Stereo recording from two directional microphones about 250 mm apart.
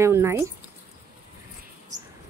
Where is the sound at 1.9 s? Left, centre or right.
Right.